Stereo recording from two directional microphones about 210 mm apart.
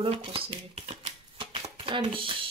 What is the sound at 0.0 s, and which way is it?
Speech, 25° right (ahead or behind).